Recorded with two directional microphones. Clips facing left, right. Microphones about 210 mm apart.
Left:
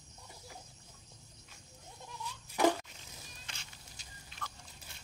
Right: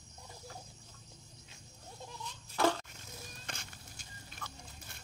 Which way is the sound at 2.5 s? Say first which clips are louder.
Left 2 dB; 15° left (ahead or behind).